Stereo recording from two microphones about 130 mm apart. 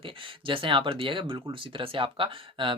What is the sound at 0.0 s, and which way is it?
Speech, 40° right (ahead or behind).